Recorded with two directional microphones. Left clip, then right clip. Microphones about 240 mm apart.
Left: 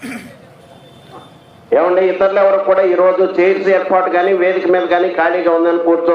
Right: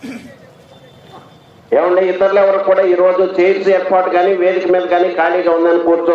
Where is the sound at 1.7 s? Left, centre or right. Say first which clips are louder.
Even; centre.